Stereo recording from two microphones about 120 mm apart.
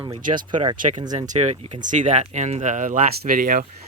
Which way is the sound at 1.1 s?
80° right.